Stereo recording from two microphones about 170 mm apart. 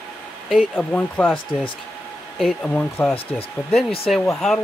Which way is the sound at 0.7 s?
10° left (ahead or behind).